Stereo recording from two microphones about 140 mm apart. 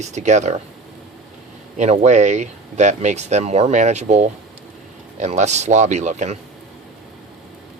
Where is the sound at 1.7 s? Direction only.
55° right (ahead or behind).